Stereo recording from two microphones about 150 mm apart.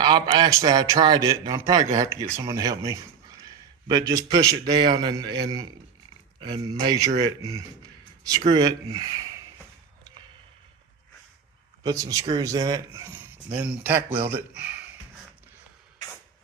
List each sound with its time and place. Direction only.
0.6 s a man's voice: 25° right (ahead or behind)
11.8 s speech: 25° right (ahead or behind)